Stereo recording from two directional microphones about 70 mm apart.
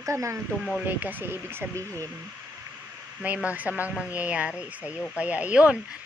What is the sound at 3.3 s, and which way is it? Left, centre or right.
A woman's voice, right.